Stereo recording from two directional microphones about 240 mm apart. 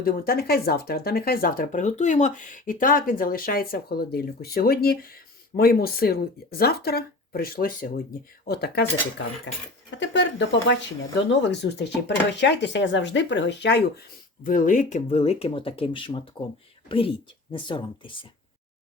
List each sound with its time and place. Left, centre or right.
0.0 s speech: left
14.4 s speech: left